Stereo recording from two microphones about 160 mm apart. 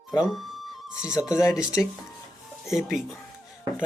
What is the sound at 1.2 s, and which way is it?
Speech, 20° left (ahead or behind).